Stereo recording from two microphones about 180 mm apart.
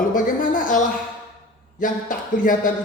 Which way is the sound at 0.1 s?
50° left (ahead or behind).